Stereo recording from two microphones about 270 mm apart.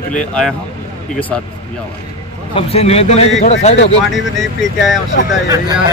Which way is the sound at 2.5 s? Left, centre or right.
Left.